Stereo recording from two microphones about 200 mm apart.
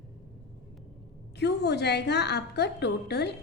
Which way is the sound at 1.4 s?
55° left (ahead or behind).